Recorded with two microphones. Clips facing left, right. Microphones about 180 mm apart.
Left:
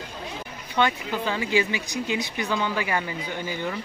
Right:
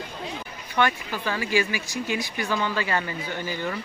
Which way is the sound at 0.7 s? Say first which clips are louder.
Left 1 dB; 20° left (ahead or behind).